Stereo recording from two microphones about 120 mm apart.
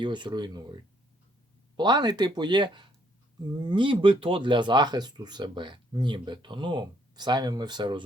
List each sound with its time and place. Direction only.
0.0 s speech: 40° right (ahead or behind)